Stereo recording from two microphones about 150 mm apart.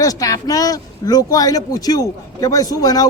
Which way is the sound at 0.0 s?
25° left (ahead or behind).